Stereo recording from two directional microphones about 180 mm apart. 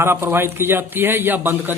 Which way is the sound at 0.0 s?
15° right (ahead or behind).